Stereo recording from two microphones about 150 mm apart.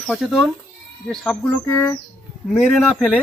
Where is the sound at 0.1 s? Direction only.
Centre (ahead or behind).